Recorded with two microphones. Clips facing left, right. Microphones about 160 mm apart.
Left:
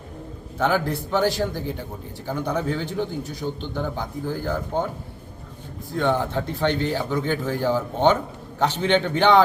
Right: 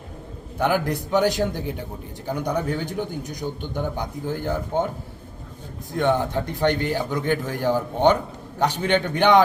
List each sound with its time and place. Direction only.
0.6 s a man's voice: 15° right (ahead or behind)
5.9 s a man's voice: 15° right (ahead or behind)